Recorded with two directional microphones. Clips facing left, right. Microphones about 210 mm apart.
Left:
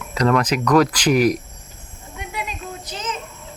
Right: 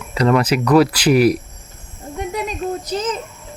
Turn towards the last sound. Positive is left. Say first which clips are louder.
# right 8 dB
turn(degrees=-40)  # may be behind; listen again after turning